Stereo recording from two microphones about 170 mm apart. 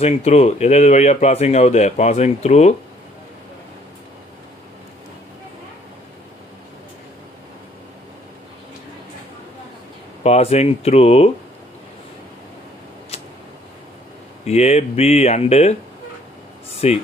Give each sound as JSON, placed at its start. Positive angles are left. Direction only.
{"t": 0.0, "sound": "speech", "side_deg": 40}
{"t": 10.2, "sound": "speech", "side_deg": 40}
{"t": 13.1, "sound": "a sound", "side_deg": 35}
{"t": 14.4, "sound": "speech", "side_deg": 40}
{"t": 16.8, "sound": "speech", "side_deg": 40}